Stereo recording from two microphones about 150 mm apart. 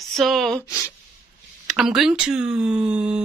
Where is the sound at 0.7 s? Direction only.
20° left (ahead or behind).